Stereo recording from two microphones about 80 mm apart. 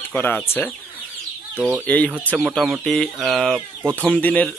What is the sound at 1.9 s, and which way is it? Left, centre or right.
Speech, centre.